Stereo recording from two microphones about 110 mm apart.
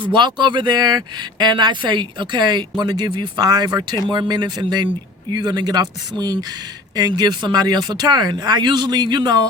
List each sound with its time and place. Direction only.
0.0 s speech: 45° right (ahead or behind)